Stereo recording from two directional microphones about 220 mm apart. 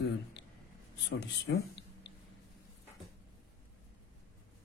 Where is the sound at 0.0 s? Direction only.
50° left (ahead or behind).